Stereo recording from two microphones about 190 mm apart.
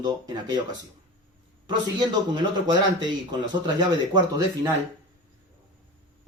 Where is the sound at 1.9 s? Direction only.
25° right (ahead or behind).